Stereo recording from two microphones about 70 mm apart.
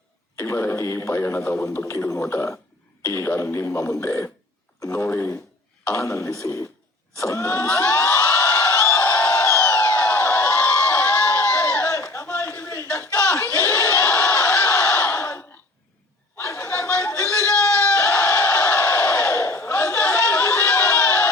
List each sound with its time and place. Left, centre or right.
0.3 s speech: left
7.5 s crowd: left
9.8 s a sound: left
10.2 s crowd: left
10.7 s crowd: left
11.5 s a sound: left
12.9 s crowd: left
16.4 s chatter: left
17.9 s battle cry: left